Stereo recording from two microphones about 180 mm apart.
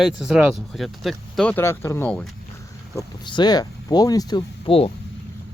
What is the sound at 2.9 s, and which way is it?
Speech, 25° left (ahead or behind).